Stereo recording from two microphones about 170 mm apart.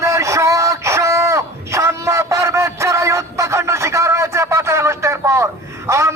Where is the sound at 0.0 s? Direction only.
20° right (ahead or behind).